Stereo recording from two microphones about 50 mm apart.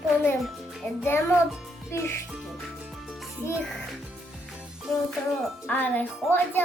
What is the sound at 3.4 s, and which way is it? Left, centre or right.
Speech, left.